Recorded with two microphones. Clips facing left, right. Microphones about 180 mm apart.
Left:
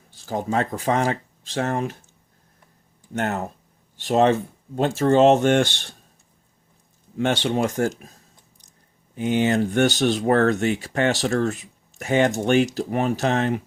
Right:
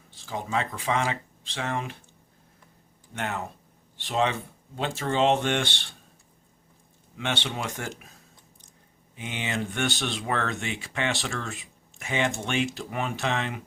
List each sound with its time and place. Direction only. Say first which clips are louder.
0.1 s speech: left 6 dB; 45° left (ahead or behind)
3.2 s speech: left 7 dB; 45° left (ahead or behind)
7.2 s speech: left 10 dB; 45° left (ahead or behind)
9.1 s speech: left 12 dB; 40° left (ahead or behind)